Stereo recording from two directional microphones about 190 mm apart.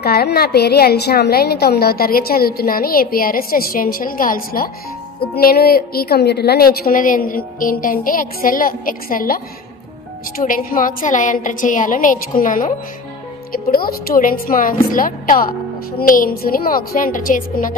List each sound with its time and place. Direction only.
0.0 s a woman's voice: 55° left (ahead or behind)